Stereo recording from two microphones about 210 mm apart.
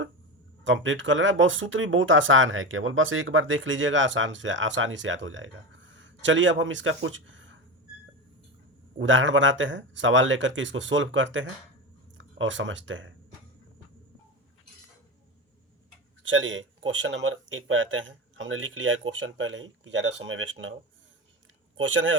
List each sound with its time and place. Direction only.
0.6 s speech: 65° right (ahead or behind)
9.0 s speech: 65° right (ahead or behind)
16.2 s speech: 65° right (ahead or behind)
21.8 s speech: 65° right (ahead or behind)